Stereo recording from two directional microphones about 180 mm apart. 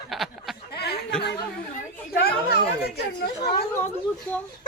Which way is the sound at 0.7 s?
65° left (ahead or behind).